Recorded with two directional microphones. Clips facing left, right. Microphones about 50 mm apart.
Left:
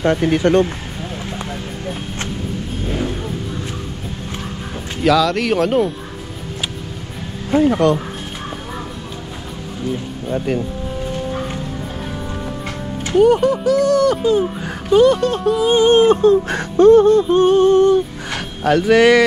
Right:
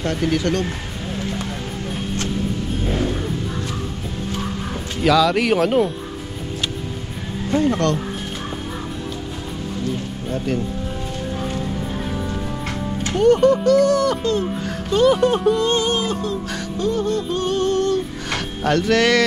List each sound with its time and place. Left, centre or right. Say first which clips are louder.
0.0 s music: left 5 dB; left
5.0 s speech: left 1 dB; centre
7.5 s speech: left 5 dB; centre
10.3 s speech: left 3 dB; centre
13.1 s speech: left 2 dB; centre
14.2 s a child's voice: left 5 dB; centre
15.9 s speech: left 11 dB; left
17.1 s music: left 9 dB; left
18.3 s speech: left 3 dB; centre